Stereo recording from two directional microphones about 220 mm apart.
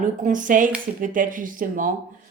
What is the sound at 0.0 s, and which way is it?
Speech, 35° right (ahead or behind).